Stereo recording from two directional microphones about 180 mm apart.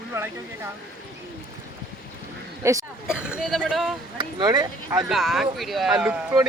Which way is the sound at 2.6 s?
15° right (ahead or behind).